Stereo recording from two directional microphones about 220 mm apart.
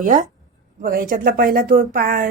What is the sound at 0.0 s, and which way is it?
Speech, 35° right (ahead or behind).